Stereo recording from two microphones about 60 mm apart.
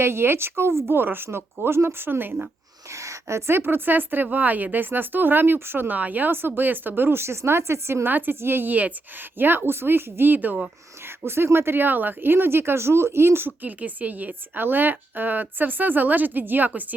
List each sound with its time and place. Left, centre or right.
0.0 s speech: right
2.9 s speech: right
8.0 s speech: right
11.3 s speech: right